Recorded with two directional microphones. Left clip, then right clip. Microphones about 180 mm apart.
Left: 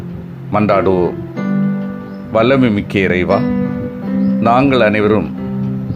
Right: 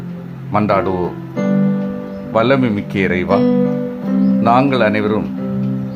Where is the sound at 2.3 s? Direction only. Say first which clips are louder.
Left 2 dB; 15° left (ahead or behind).